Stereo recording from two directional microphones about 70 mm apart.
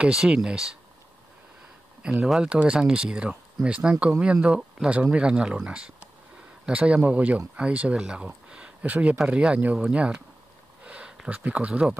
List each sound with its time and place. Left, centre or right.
0.0 s speech: centre
2.2 s speech: centre
8.5 s a sound: centre
9.3 s speech: centre
10.8 s a sound: centre
11.2 s speech: right